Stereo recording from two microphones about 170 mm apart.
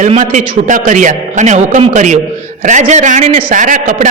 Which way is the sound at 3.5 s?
50° right (ahead or behind).